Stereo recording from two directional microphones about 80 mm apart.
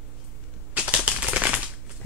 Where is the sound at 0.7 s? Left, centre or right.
Centre.